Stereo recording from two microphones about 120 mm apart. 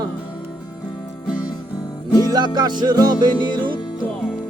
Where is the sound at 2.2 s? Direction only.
35° right (ahead or behind).